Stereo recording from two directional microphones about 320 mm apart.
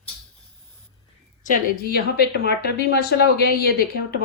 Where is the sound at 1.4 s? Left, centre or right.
Left.